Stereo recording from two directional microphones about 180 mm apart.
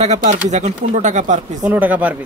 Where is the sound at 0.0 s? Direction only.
40° right (ahead or behind).